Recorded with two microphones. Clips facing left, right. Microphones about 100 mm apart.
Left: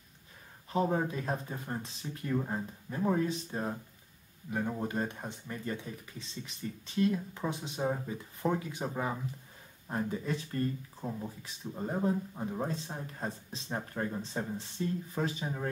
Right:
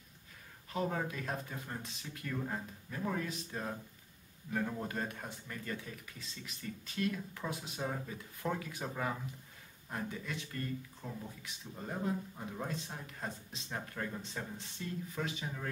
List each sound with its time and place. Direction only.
0.7 s speech: 25° left (ahead or behind)
4.5 s speech: 20° left (ahead or behind)
9.8 s speech: 30° left (ahead or behind)